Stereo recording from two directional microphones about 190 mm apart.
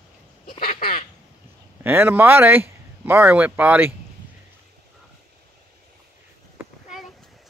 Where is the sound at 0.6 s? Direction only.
50° left (ahead or behind).